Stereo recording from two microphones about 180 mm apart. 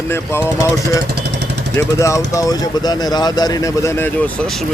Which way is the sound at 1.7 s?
15° left (ahead or behind).